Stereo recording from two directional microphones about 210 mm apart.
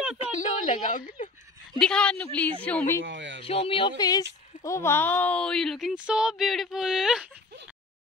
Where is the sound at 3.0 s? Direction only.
60° right (ahead or behind).